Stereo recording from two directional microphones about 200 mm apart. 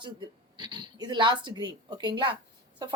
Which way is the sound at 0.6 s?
20° right (ahead or behind).